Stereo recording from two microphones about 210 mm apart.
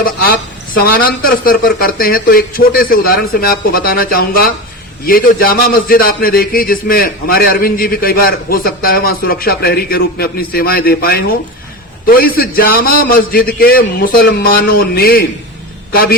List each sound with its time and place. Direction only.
0.0 s a man's voice: 45° left (ahead or behind)